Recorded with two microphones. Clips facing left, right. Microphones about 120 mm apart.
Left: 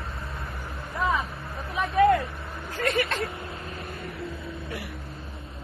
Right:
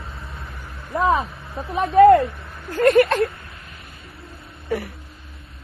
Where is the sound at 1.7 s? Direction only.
35° right (ahead or behind).